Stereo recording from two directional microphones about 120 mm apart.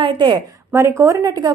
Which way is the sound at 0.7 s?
25° right (ahead or behind).